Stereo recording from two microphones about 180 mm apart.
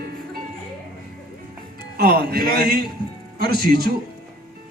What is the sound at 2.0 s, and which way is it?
Speech, 55° right (ahead or behind).